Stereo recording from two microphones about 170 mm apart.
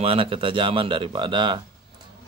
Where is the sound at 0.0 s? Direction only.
35° right (ahead or behind).